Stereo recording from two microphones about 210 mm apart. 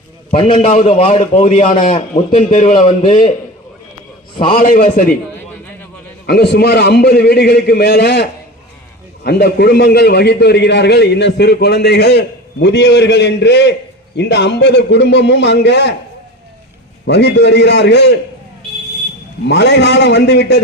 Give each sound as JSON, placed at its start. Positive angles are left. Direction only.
{"t": 0.3, "sound": "a man's voice", "side_deg": 25}
{"t": 4.4, "sound": "a man's voice", "side_deg": 25}
{"t": 4.6, "sound": "a man's voice", "side_deg": 40}
{"t": 6.2, "sound": "a man's voice", "side_deg": 50}
{"t": 17.1, "sound": "a man's voice", "side_deg": 55}
{"t": 19.5, "sound": "a man's voice", "side_deg": 55}